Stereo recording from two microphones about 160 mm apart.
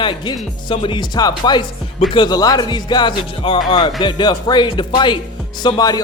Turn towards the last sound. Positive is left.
turn(degrees=25)  # may be behind; listen again after turning